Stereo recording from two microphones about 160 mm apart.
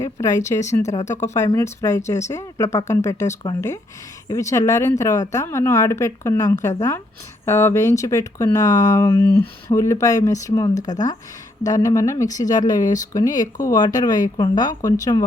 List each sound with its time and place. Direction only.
0.0 s speech: 20° left (ahead or behind)